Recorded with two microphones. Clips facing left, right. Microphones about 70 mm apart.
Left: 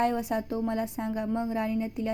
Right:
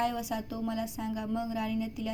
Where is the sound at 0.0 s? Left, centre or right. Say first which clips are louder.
Left 5 dB; left.